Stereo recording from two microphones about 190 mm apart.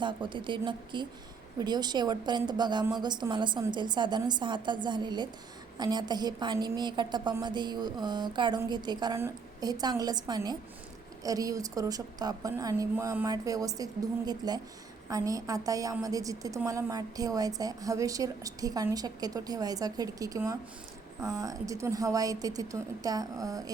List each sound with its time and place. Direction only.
0.0 s a woman's voice: 25° right (ahead or behind)